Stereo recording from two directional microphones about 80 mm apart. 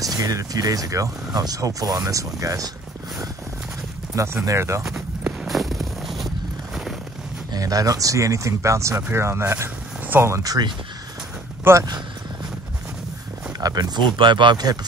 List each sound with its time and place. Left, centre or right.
0.0 s speech: right
4.1 s speech: right
5.4 s a sound: centre
7.5 s speech: right
10.0 s a sound: right
10.3 s speech: right
11.7 s speech: right
13.6 s speech: right